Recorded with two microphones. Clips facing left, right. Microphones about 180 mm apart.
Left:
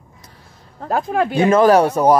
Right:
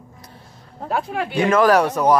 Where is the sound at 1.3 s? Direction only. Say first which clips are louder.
Left 3 dB; 25° left (ahead or behind).